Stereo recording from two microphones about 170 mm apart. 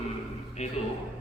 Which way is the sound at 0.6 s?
40° left (ahead or behind).